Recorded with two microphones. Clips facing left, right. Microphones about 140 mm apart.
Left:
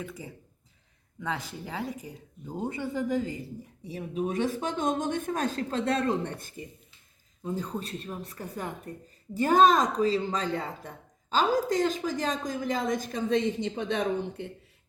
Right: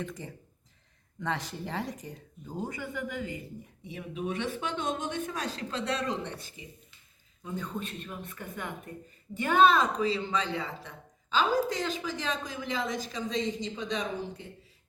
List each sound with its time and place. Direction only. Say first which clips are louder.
0.0 s speech: right 1 dB; 5° left (ahead or behind)
2.5 s speech: left 4 dB; 25° left (ahead or behind); by 6.7 s 50° left (ahead or behind)
7.4 s speech: left 3 dB; 35° left (ahead or behind); by 14.5 s 60° left (ahead or behind)